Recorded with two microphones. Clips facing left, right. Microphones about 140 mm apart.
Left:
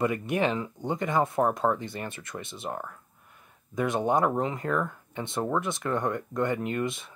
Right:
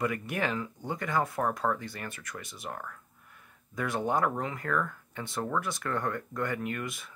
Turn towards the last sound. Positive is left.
turn(degrees=25)  # may be behind; listen again after turning